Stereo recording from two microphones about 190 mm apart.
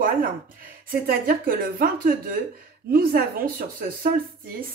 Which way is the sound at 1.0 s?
50° right (ahead or behind).